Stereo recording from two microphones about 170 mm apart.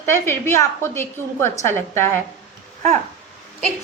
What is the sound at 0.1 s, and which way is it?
A woman's voice, 15° left (ahead or behind).